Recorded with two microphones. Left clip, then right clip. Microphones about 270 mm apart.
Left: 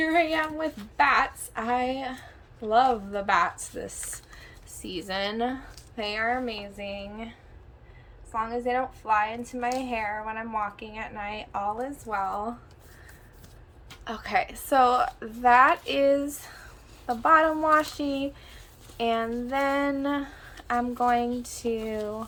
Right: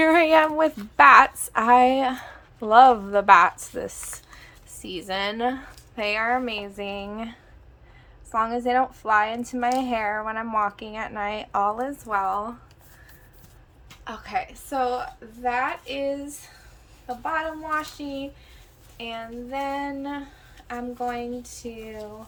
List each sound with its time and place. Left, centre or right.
0.0 s a woman's voice: centre
14.0 s a woman's voice: centre